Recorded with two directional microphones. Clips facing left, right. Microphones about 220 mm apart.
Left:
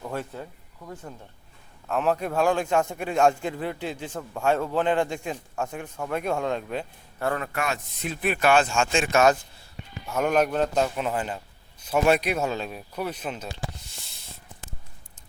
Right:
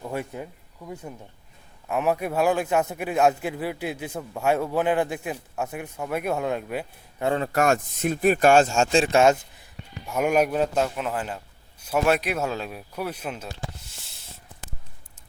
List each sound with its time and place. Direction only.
0.0 s speech: 10° right (ahead or behind)
1.9 s a man's voice: 10° right (ahead or behind)
7.2 s a man's voice: 25° right (ahead or behind)
7.5 s speech: 45° right (ahead or behind); by 9.6 s 20° right (ahead or behind)
10.1 s a man's voice: 10° right (ahead or behind)
13.7 s a sound: 5° right (ahead or behind)